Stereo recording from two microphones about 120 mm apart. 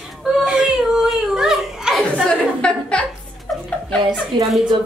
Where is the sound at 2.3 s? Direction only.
10° left (ahead or behind).